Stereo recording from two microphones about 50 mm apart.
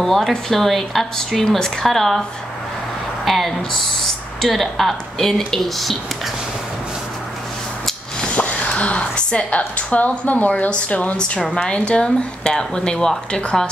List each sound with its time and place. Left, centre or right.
0.0 s speech: centre
3.3 s a sound: centre
4.4 s speech: centre
8.4 s a woman's voice: left; by 13.4 s centre